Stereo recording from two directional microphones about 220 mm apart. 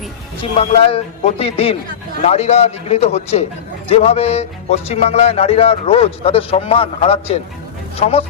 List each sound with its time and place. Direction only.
0.5 s speech: 25° left (ahead or behind)